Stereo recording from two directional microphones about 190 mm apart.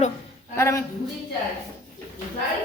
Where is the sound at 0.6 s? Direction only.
15° left (ahead or behind).